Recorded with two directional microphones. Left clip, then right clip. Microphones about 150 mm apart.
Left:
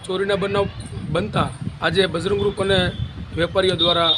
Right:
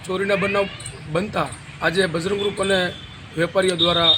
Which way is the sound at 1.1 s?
35° left (ahead or behind).